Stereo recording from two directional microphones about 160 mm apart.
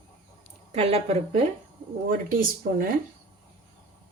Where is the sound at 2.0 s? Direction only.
60° right (ahead or behind).